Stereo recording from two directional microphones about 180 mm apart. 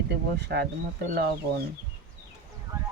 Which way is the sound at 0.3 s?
70° right (ahead or behind).